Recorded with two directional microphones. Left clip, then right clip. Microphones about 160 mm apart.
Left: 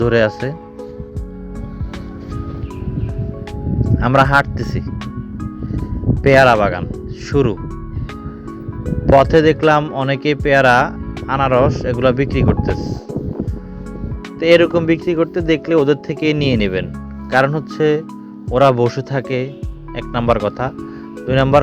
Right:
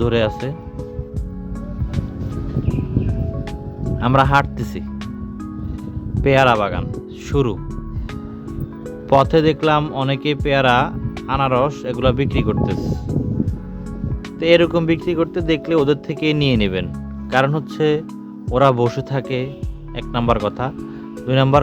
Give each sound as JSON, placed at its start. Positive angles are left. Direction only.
{"t": 0.0, "sound": "speech", "side_deg": 15}
{"t": 3.9, "sound": "speech", "side_deg": 15}
{"t": 6.2, "sound": "speech", "side_deg": 15}
{"t": 9.0, "sound": "speech", "side_deg": 15}
{"t": 9.8, "sound": "speech", "side_deg": 0}
{"t": 10.1, "sound": "speech", "side_deg": 15}
{"t": 14.3, "sound": "speech", "side_deg": 10}